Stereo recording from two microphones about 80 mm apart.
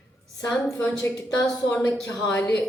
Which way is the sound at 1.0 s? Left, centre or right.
Left.